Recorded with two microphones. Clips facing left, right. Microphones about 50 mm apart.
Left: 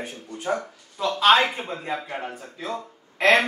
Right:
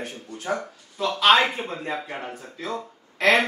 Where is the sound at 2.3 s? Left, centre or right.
Centre.